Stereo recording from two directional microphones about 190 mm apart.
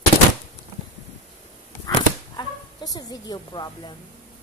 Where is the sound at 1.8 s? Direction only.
20° left (ahead or behind).